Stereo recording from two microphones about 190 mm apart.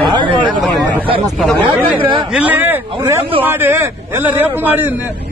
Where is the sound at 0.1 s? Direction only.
25° right (ahead or behind).